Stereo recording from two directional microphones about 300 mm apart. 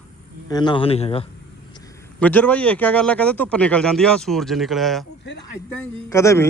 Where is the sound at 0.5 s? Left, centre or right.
Centre.